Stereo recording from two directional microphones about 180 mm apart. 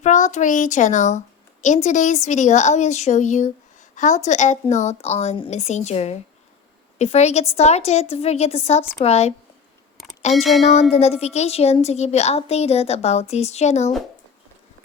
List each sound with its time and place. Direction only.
0.0 s a child's voice: 45° left (ahead or behind)
10.3 s speech: centre (ahead or behind)
10.6 s a woman's voice: 35° left (ahead or behind)